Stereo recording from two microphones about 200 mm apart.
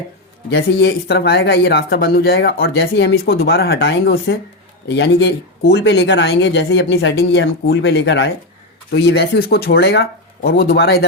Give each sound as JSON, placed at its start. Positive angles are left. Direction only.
{"t": 0.5, "sound": "speech", "side_deg": 60}
{"t": 2.6, "sound": "speech", "side_deg": 65}